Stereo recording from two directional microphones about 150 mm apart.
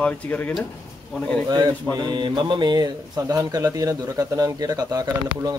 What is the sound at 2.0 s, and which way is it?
Speech, 30° right (ahead or behind).